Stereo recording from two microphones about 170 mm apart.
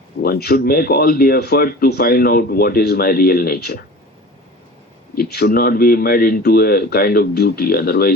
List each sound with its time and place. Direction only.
0.2 s speech: 65° left (ahead or behind)
5.1 s speech: 65° left (ahead or behind)